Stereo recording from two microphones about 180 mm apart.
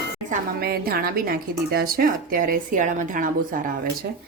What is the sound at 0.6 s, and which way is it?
A woman's voice, 60° right (ahead or behind).